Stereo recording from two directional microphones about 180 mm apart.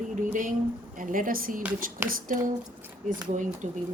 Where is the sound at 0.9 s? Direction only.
50° right (ahead or behind).